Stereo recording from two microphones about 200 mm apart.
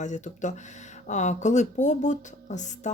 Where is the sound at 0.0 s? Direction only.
35° left (ahead or behind).